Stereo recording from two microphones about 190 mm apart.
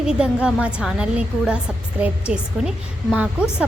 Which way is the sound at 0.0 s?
5° right (ahead or behind).